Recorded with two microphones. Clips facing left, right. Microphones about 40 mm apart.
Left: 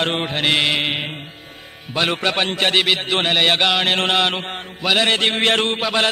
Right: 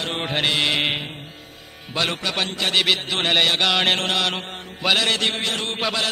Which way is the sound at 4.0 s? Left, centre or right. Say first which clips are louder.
Left 4 dB; left.